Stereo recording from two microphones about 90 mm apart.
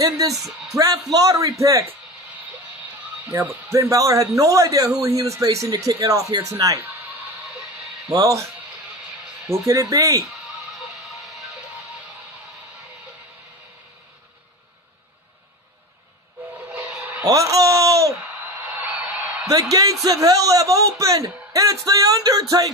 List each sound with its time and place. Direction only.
0.0 s a man's voice: 40° right (ahead or behind)
3.3 s a man's voice: 25° right (ahead or behind)
6.8 s a sound: 20° right (ahead or behind)
8.1 s a man's voice: 40° right (ahead or behind)
9.7 s a man's voice: 35° right (ahead or behind)
11.1 s music: centre (ahead or behind)
17.2 s a sound: 40° right (ahead or behind)
18.7 s a sound: 15° right (ahead or behind)
19.7 s a man's voice: 40° right (ahead or behind)